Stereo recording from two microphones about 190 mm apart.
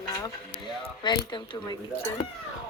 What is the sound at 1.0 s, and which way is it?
Speech, 20° left (ahead or behind).